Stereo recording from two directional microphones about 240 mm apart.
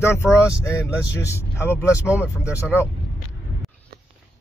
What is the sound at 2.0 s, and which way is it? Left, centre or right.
Speech, centre.